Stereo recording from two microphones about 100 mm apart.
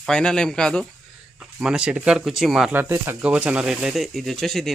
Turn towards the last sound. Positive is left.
turn(degrees=0)  # may be behind; listen again after turning